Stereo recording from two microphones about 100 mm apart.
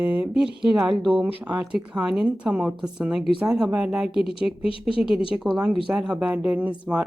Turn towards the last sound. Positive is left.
turn(degrees=-10)  # may be behind; listen again after turning